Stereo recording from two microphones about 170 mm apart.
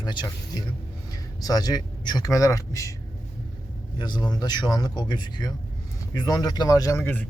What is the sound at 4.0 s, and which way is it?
Speech, 25° left (ahead or behind).